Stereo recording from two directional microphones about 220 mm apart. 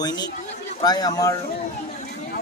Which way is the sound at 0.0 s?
20° left (ahead or behind).